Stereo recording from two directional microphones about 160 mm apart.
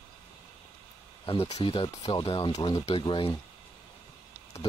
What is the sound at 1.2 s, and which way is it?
Speech, 35° left (ahead or behind).